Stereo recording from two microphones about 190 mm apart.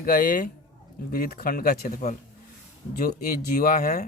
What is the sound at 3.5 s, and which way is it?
Speech, 50° left (ahead or behind).